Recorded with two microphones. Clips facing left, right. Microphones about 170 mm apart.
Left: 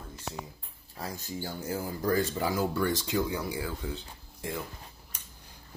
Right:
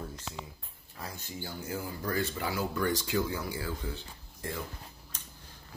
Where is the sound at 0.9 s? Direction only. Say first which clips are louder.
Left 4 dB; 40° left (ahead or behind).